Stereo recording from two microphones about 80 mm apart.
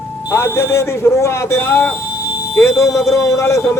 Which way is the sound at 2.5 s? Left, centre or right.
Left.